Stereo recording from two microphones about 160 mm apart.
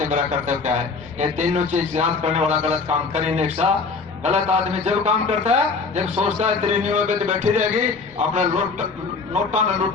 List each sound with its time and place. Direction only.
0.0 s a man's voice: 50° right (ahead or behind)